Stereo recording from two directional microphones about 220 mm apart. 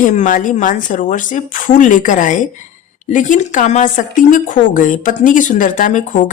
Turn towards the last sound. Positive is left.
turn(degrees=35)  # may be behind; listen again after turning